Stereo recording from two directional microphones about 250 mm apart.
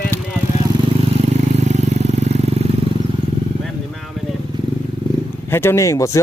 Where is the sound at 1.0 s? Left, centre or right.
Right.